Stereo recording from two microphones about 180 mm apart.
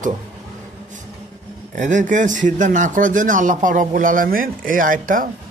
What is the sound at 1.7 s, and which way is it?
Speech, 45° right (ahead or behind).